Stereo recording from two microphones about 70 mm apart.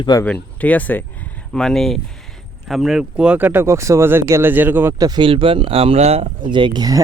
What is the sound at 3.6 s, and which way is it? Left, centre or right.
Speech, right.